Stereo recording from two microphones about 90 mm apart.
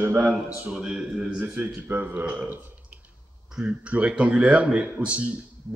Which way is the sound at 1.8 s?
25° right (ahead or behind).